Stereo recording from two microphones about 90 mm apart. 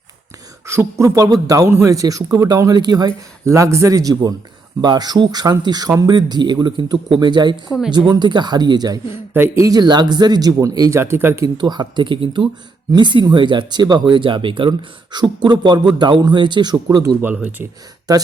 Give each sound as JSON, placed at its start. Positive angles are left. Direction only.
{"t": 0.6, "sound": "speech", "side_deg": -30}
{"t": 3.4, "sound": "speech", "side_deg": -30}
{"t": 7.7, "sound": "speech", "side_deg": -5}
{"t": 8.1, "sound": "speech", "side_deg": -55}
{"t": 9.1, "sound": "a man's voice", "side_deg": -25}
{"t": 9.6, "sound": "speech", "side_deg": -45}
{"t": 11.4, "sound": "speech", "side_deg": -55}
{"t": 18.1, "sound": "speech", "side_deg": -45}